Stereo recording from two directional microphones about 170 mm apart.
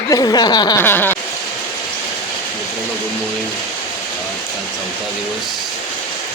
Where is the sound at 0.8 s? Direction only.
10° left (ahead or behind).